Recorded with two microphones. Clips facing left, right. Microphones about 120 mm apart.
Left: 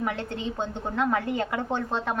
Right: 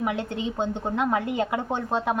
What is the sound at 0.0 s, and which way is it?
A woman's voice, 15° right (ahead or behind).